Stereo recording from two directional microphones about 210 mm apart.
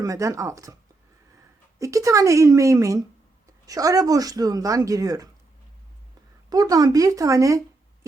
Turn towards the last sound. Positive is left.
turn(degrees=-15)  # may be behind; listen again after turning